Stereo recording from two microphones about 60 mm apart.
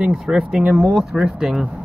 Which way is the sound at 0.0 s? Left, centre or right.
Centre.